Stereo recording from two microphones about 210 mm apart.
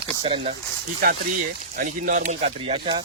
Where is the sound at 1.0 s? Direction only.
40° right (ahead or behind); by 3.0 s 25° right (ahead or behind).